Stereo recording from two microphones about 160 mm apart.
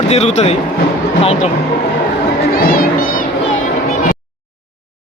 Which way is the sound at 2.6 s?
65° left (ahead or behind).